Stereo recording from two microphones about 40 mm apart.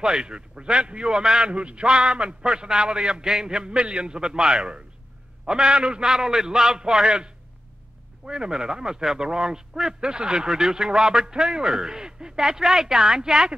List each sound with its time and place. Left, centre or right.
0.0 s a man's voice: centre
8.3 s speech: centre